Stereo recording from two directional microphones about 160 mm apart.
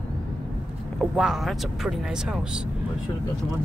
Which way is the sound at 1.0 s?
Centre (ahead or behind).